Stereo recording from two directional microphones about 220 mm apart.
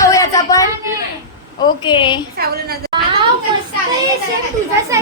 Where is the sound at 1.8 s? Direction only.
20° left (ahead or behind).